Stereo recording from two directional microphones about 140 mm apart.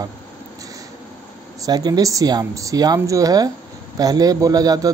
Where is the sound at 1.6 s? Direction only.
30° right (ahead or behind).